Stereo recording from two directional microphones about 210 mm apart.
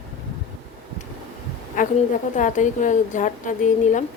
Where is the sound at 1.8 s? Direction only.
40° left (ahead or behind).